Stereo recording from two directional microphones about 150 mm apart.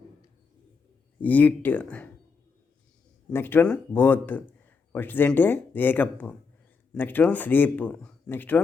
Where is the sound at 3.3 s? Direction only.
15° left (ahead or behind).